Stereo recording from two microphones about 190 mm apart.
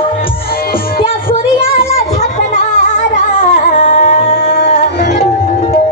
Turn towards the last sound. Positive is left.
turn(degrees=60)  # may be behind; listen again after turning